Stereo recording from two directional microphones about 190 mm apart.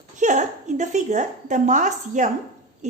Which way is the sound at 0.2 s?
40° right (ahead or behind).